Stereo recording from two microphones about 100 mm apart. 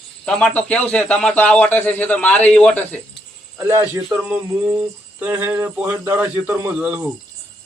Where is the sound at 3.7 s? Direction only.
25° right (ahead or behind).